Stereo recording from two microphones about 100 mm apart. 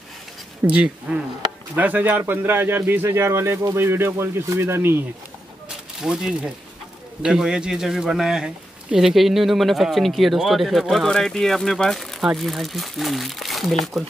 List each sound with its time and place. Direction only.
0.7 s a man's voice: 10° right (ahead or behind)
5.9 s a man's voice: 5° right (ahead or behind)